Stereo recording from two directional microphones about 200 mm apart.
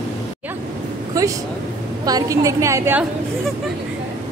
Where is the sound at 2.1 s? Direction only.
15° right (ahead or behind).